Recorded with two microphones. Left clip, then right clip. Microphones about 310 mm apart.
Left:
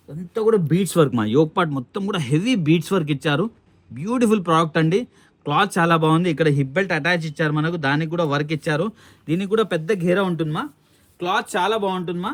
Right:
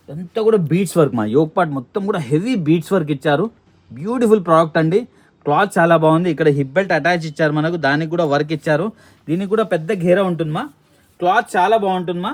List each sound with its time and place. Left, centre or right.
0.3 s speech: centre